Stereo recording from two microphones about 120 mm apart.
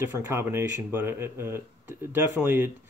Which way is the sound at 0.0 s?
20° right (ahead or behind).